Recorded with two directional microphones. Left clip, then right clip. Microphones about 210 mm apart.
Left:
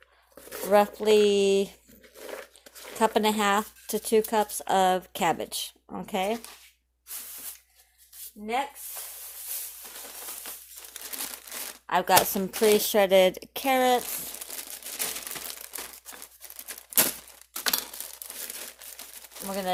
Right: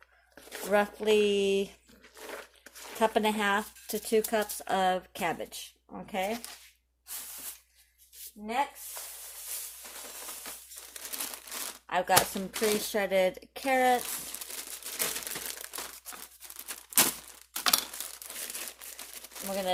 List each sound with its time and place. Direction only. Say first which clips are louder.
0.7 s speech: left 5 dB; 20° left (ahead or behind); by 6.3 s 40° left (ahead or behind)
11.9 s speech: left 4 dB; 40° left (ahead or behind)
14.9 s crumpling: even; 10° left (ahead or behind)